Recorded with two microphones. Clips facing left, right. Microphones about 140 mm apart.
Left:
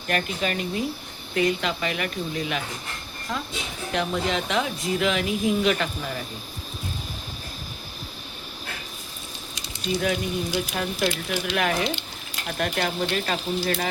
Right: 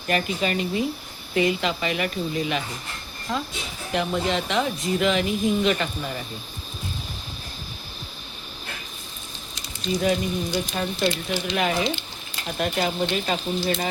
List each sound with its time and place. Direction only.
0.1 s speech: 5° right (ahead or behind)
9.8 s speech: 5° left (ahead or behind)